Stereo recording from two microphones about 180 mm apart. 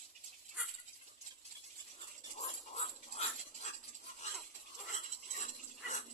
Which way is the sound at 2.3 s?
40° left (ahead or behind).